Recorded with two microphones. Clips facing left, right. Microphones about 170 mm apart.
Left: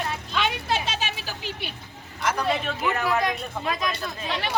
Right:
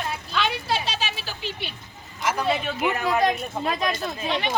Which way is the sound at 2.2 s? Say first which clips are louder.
Right 1 dB; 5° right (ahead or behind).